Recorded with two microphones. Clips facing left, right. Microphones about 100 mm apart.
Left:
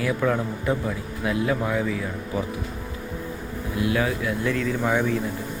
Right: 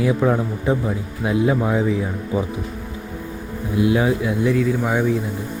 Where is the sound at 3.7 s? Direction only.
20° right (ahead or behind).